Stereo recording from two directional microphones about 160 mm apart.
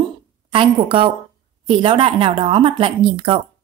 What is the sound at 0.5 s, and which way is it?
A woman's voice, 30° right (ahead or behind).